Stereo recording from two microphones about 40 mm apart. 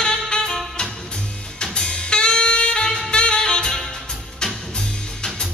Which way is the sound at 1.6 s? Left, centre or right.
Left.